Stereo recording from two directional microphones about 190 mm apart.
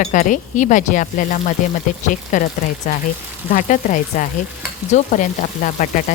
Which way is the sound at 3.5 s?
45° left (ahead or behind).